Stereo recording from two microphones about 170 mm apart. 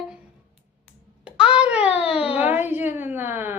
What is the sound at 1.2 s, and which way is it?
Babbling, 5° right (ahead or behind).